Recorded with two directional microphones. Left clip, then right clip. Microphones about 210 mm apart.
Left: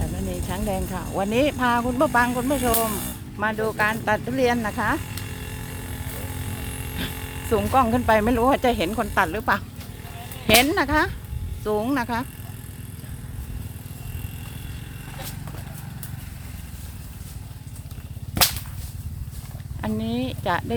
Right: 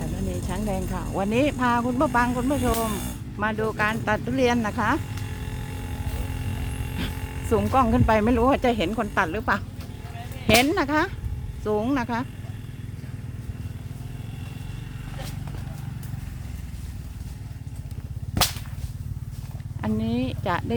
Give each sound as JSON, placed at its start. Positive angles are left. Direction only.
{"t": 0.0, "sound": "speech", "side_deg": 5}
{"t": 5.1, "sound": "a sound", "side_deg": 25}
{"t": 7.1, "sound": "electric shaver", "side_deg": 40}
{"t": 7.5, "sound": "speech", "side_deg": -5}
{"t": 19.8, "sound": "speech", "side_deg": 0}